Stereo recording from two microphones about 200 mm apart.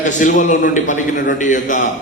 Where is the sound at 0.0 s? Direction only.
40° left (ahead or behind).